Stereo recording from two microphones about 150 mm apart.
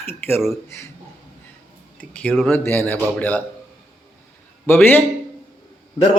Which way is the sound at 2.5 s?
15° left (ahead or behind).